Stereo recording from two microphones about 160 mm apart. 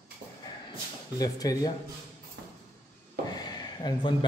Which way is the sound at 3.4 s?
25° left (ahead or behind).